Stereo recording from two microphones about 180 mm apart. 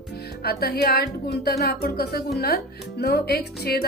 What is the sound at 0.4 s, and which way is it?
A woman's voice, 60° left (ahead or behind).